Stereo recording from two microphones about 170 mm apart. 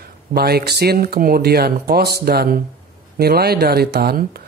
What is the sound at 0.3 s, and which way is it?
Speech, 65° right (ahead or behind).